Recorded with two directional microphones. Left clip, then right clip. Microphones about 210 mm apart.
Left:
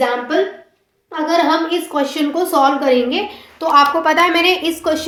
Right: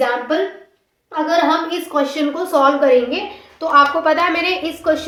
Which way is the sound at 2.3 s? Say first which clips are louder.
Left 1 dB; 35° left (ahead or behind).